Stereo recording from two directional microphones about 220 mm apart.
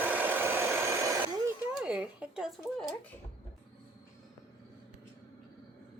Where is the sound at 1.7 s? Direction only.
5° right (ahead or behind).